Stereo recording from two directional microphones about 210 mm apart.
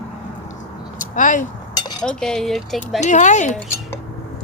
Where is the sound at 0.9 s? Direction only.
40° left (ahead or behind).